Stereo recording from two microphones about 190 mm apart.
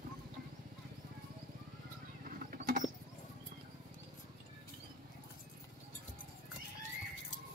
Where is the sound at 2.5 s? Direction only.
45° right (ahead or behind).